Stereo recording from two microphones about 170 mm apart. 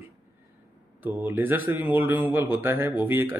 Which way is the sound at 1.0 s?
10° right (ahead or behind).